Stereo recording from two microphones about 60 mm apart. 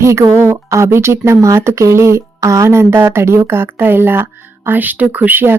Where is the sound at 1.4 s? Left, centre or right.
Right.